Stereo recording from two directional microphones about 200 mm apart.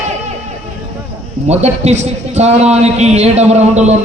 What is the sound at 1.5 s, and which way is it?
A man's voice, 35° right (ahead or behind).